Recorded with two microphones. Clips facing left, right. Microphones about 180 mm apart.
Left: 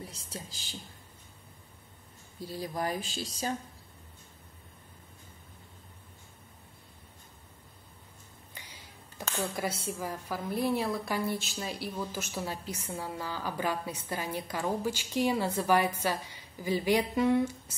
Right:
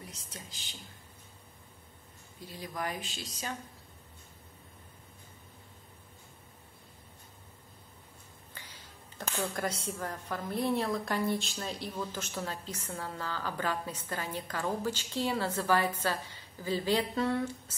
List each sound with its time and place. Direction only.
0.0 s speech: 30° left (ahead or behind)
2.4 s speech: 35° left (ahead or behind)
8.5 s a sound: 15° left (ahead or behind)
9.3 s a woman's voice: 10° left (ahead or behind)